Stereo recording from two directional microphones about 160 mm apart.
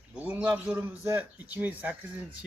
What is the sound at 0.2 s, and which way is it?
A man's voice, 10° right (ahead or behind).